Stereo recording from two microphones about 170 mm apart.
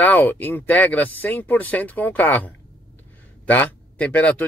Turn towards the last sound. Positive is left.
turn(degrees=10)  # may be behind; listen again after turning